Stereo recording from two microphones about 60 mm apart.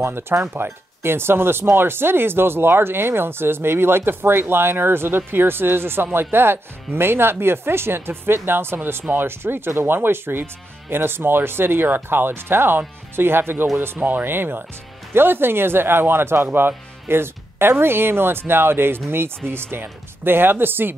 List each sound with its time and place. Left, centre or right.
0.0 s speech: right